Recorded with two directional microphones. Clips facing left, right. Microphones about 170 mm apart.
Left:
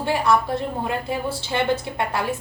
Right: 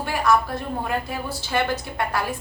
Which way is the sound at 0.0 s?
25° left (ahead or behind).